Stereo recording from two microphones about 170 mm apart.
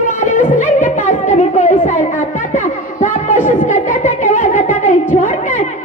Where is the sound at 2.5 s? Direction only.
45° left (ahead or behind).